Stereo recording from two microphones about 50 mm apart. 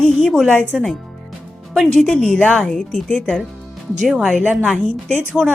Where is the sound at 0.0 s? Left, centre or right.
Centre.